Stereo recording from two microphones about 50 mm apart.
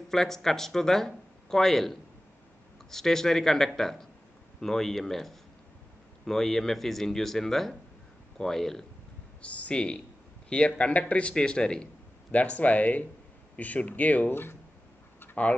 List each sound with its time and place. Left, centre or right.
0.1 s speech: centre
9.4 s a man's voice: left
14.3 s speech: left